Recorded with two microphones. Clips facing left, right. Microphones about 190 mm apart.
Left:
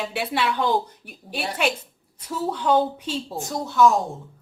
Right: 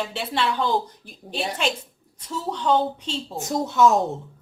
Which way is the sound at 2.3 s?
10° left (ahead or behind).